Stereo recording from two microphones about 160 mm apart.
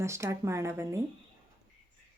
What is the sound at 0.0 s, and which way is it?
Speech, 15° right (ahead or behind).